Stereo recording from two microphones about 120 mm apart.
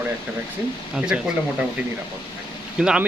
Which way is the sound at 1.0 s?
10° right (ahead or behind).